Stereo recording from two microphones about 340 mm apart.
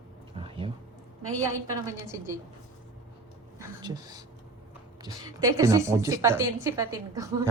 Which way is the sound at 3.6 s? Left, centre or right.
Centre.